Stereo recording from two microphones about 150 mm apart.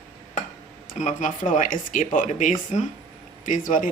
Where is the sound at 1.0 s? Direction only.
55° left (ahead or behind).